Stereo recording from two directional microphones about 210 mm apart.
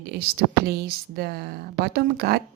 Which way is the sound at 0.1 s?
50° right (ahead or behind).